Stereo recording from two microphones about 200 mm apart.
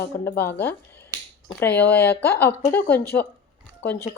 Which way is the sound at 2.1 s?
55° left (ahead or behind).